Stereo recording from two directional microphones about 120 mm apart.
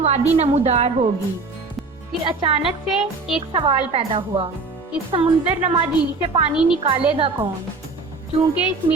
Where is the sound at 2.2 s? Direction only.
50° right (ahead or behind).